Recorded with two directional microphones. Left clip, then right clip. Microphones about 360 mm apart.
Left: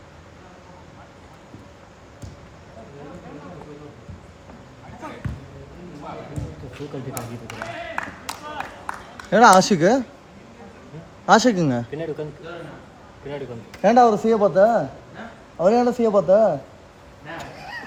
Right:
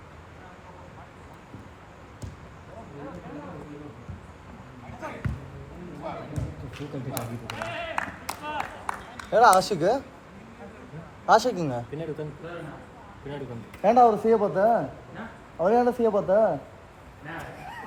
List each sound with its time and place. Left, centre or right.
8.5 s a sound: right
9.3 s speech: left
11.3 s speech: left
13.8 s speech: left